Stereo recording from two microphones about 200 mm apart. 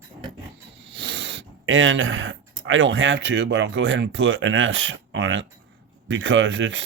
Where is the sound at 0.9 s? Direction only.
60° right (ahead or behind).